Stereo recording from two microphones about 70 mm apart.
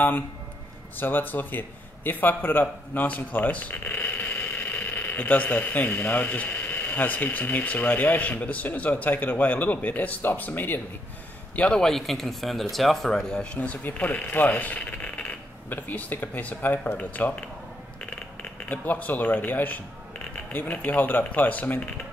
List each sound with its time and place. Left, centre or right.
0.9 s a man's voice: left
11.8 s speech: centre
13.6 s speech: left
18.4 s speech: left